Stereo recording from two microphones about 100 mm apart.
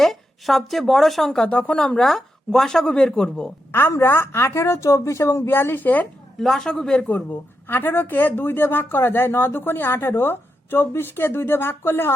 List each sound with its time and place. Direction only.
0.0 s speech: centre (ahead or behind)
3.7 s speech: 25° left (ahead or behind)
6.4 s speech: 5° left (ahead or behind)
7.7 s speech: 20° left (ahead or behind)